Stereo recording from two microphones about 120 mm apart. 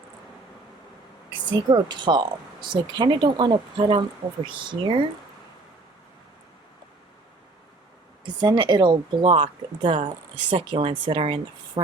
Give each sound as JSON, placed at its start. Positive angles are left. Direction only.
{"t": 1.3, "sound": "speech", "side_deg": -40}
{"t": 8.2, "sound": "speech", "side_deg": -40}